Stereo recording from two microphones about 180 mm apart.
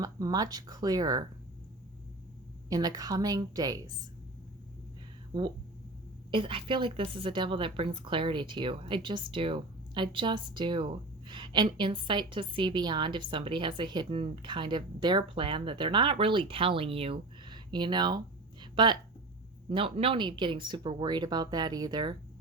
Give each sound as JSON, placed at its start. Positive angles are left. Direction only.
{"t": 0.0, "sound": "a woman's voice", "side_deg": -20}
{"t": 2.6, "sound": "a woman's voice", "side_deg": -20}
{"t": 6.3, "sound": "a woman's voice", "side_deg": -30}
{"t": 18.6, "sound": "a sound", "side_deg": -25}
{"t": 19.7, "sound": "a woman's voice", "side_deg": -30}